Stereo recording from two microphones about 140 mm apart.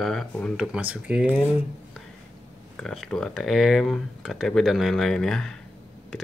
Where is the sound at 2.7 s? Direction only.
5° left (ahead or behind).